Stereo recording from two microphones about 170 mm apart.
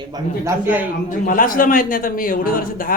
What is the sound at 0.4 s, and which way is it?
Speech, 10° right (ahead or behind).